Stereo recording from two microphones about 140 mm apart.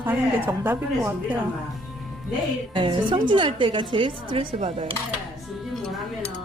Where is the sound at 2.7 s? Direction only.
35° right (ahead or behind).